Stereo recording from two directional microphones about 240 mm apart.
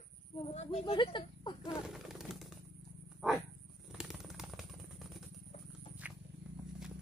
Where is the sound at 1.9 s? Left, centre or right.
Centre.